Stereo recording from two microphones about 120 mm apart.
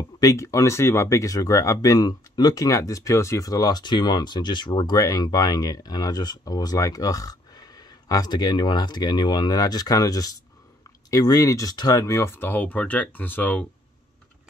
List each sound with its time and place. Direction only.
0.2 s speech: 25° left (ahead or behind)